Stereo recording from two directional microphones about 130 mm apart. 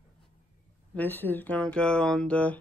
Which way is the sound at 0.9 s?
15° left (ahead or behind).